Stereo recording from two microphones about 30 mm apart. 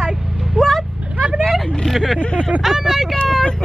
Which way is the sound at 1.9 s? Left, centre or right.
Centre.